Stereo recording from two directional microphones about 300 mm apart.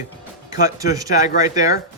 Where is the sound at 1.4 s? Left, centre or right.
Left.